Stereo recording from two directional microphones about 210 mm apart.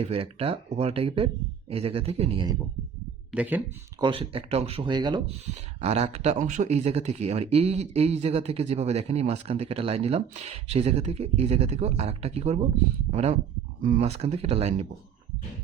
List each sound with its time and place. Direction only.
0.1 s speech: 25° right (ahead or behind)
3.3 s speech: 10° right (ahead or behind)
4.0 s speech: 25° right (ahead or behind)